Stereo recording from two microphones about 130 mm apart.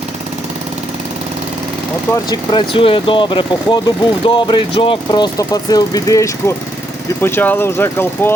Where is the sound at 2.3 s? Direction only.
40° left (ahead or behind).